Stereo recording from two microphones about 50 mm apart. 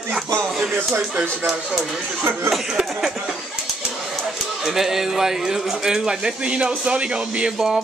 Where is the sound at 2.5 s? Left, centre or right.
Centre.